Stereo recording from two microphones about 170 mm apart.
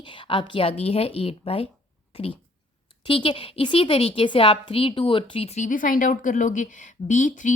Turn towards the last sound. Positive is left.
turn(degrees=50)  # may be behind; listen again after turning